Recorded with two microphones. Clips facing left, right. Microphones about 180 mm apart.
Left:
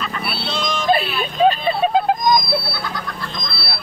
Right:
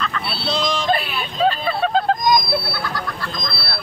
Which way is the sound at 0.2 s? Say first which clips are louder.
Right 2 dB; 30° right (ahead or behind).